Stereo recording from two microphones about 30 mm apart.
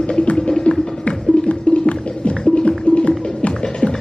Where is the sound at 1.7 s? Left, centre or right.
Left.